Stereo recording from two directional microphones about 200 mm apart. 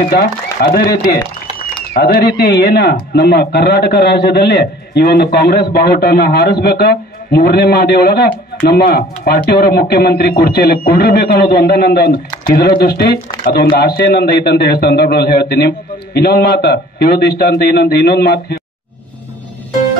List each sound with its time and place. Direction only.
0.1 s a man's voice: 50° left (ahead or behind)
2.3 s a man's voice: 55° left (ahead or behind)